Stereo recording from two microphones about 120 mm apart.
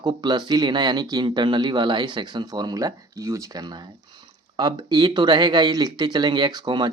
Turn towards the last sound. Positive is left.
turn(degrees=-35)  # may be behind; listen again after turning